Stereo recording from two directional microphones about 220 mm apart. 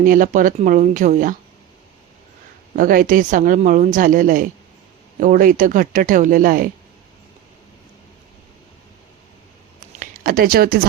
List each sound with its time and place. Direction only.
0.0 s speech: 35° right (ahead or behind)
2.7 s speech: 40° right (ahead or behind)
10.0 s speech: 40° right (ahead or behind)